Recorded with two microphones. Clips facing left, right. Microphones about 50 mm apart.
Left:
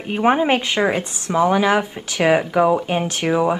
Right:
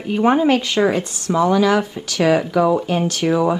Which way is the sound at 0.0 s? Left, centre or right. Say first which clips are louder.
Right 2 dB; left.